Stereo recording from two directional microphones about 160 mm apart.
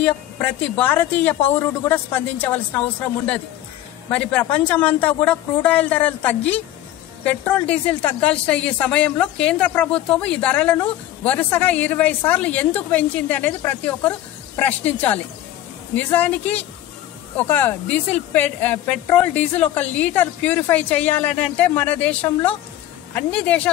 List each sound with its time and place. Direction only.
0.0 s speech: 10° left (ahead or behind)
4.1 s speech: 5° left (ahead or behind)